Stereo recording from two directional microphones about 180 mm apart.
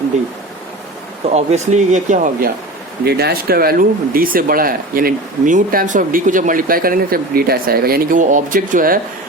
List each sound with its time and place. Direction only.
1.3 s speech: 35° right (ahead or behind)
3.0 s speech: 60° right (ahead or behind)